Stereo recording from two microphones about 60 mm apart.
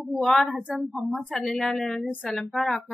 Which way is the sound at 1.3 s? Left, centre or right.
Centre.